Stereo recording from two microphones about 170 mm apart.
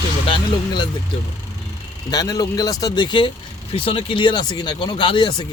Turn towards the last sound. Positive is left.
turn(degrees=25)  # may be behind; listen again after turning